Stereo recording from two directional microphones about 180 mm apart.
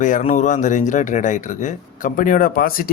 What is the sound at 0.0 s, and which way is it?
Speech, 45° left (ahead or behind).